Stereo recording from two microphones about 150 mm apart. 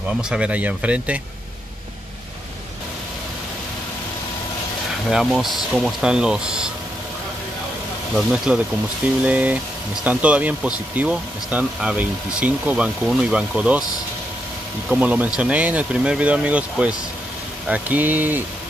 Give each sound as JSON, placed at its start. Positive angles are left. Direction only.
{"t": 0.2, "sound": "speech", "side_deg": -5}
{"t": 5.1, "sound": "speech", "side_deg": 0}
{"t": 8.1, "sound": "speech", "side_deg": -5}
{"t": 14.9, "sound": "speech", "side_deg": -10}